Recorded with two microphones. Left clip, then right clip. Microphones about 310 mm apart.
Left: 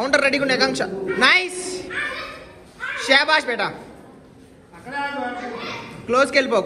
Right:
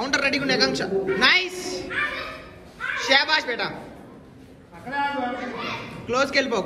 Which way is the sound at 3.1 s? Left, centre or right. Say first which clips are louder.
Left 4 dB; centre.